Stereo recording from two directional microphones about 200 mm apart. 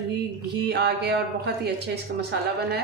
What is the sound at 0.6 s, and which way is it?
A woman's voice, 55° right (ahead or behind).